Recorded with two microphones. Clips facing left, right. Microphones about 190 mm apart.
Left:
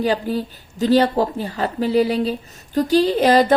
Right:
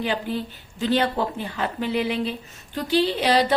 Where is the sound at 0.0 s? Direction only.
40° left (ahead or behind).